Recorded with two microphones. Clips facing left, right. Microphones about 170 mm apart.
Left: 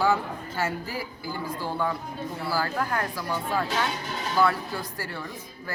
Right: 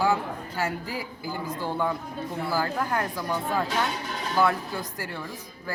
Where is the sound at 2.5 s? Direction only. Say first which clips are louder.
Even; 15° right (ahead or behind).